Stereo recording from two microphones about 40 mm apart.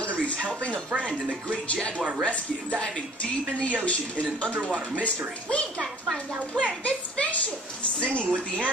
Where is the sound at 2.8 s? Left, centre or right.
Left.